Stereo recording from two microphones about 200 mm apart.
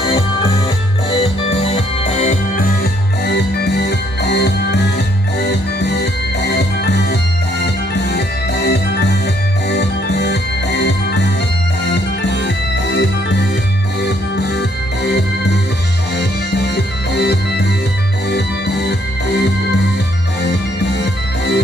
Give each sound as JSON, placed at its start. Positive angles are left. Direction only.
{"t": 1.1, "sound": "music", "side_deg": 30}
{"t": 20.4, "sound": "music", "side_deg": 60}